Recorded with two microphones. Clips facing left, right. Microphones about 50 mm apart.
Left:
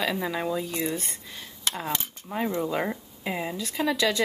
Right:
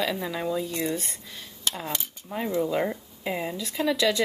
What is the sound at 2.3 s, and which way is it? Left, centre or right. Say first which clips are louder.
Speech: right 1 dB; centre.